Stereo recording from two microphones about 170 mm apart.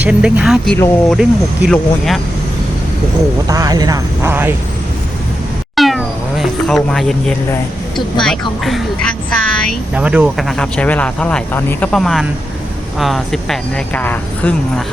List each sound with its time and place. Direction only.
0.0 s vehicle: 5° right (ahead or behind)
1.1 s speech: centre (ahead or behind)
3.4 s speech: 20° right (ahead or behind)
5.7 s cat: centre (ahead or behind)
8.2 s a woman's voice: centre (ahead or behind)
9.9 s speech: 5° right (ahead or behind); by 14.8 s 10° left (ahead or behind)